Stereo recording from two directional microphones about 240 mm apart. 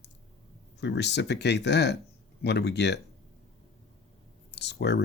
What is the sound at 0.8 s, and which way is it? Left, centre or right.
Speech, left.